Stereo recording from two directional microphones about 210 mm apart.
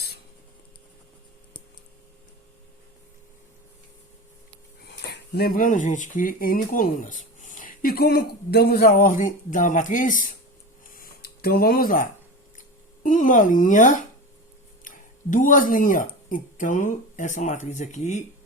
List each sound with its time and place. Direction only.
4.9 s speech: 55° left (ahead or behind)
10.8 s a sound: 45° left (ahead or behind)
13.0 s speech: 40° left (ahead or behind)